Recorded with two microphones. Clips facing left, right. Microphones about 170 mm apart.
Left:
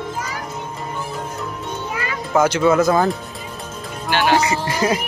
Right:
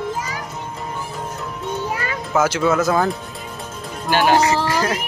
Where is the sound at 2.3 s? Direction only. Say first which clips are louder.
Left 2 dB; centre (ahead or behind).